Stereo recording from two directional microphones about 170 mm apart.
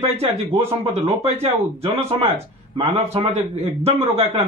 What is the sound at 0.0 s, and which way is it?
Speech, 35° right (ahead or behind).